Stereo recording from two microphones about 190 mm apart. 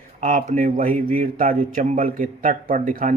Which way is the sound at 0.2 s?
40° right (ahead or behind).